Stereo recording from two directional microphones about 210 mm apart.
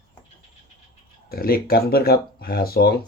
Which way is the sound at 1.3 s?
45° left (ahead or behind).